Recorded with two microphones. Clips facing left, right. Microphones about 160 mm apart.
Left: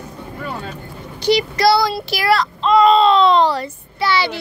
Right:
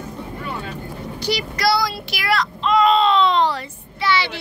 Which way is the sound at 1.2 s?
25° left (ahead or behind).